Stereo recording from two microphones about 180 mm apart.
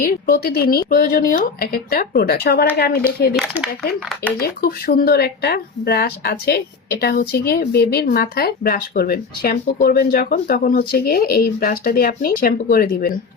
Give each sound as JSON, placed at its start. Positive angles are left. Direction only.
{"t": 0.0, "sound": "speech", "side_deg": 60}
{"t": 4.4, "sound": "speech", "side_deg": 60}